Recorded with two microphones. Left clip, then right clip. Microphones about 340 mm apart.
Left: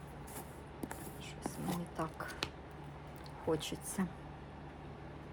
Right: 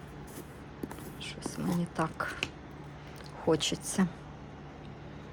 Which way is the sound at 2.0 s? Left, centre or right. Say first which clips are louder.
Right 11 dB; right.